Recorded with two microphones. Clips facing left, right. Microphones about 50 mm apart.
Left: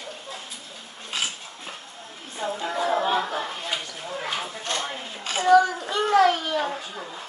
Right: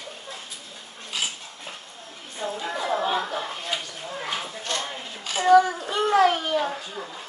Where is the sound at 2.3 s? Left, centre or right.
Centre.